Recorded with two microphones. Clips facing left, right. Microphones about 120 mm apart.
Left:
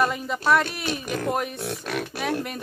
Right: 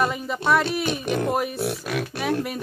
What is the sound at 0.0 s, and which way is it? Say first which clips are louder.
Speech: even; centre (ahead or behind).